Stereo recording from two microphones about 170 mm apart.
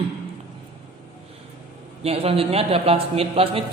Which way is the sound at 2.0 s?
35° right (ahead or behind).